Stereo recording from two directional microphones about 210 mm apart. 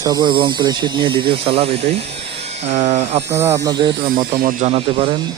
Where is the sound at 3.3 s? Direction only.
15° right (ahead or behind).